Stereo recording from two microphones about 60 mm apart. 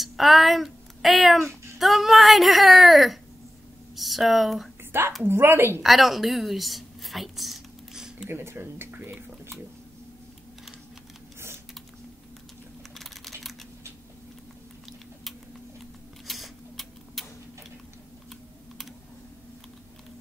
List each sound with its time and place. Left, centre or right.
0.0 s speech: centre
1.5 s child singing: right
1.8 s speech: centre
5.2 s speech: right
5.8 s whispering: centre
8.3 s speech: right
12.9 s typing: centre
16.3 s tick-tock: centre